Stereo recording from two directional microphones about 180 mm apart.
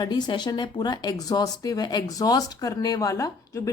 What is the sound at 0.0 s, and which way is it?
Speech, 25° left (ahead or behind).